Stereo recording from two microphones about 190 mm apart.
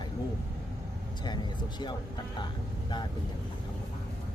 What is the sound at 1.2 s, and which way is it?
Speech, 25° left (ahead or behind).